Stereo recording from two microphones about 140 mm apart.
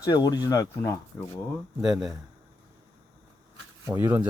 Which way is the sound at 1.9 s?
5° right (ahead or behind).